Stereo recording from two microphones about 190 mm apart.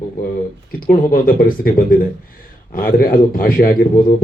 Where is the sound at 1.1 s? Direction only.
45° left (ahead or behind).